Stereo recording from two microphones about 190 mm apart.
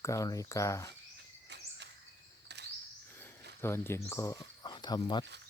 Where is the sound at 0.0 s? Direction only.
15° left (ahead or behind).